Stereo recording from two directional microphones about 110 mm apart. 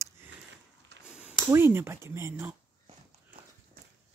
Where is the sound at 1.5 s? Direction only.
20° right (ahead or behind).